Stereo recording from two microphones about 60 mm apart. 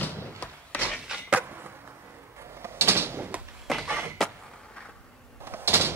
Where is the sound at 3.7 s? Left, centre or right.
Centre.